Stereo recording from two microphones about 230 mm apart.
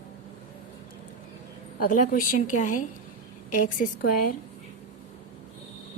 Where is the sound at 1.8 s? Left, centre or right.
Left.